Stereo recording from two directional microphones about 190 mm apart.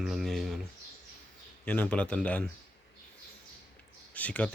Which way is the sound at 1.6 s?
10° left (ahead or behind).